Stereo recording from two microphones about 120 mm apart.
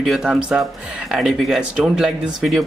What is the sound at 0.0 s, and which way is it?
Speech, centre (ahead or behind).